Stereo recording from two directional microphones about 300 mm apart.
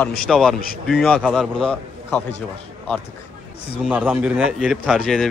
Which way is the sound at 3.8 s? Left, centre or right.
Centre.